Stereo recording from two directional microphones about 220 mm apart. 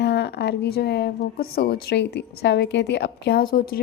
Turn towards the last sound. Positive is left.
turn(degrees=45)  # may be behind; listen again after turning